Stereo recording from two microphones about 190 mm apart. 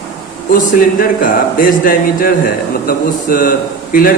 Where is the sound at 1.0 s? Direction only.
45° left (ahead or behind).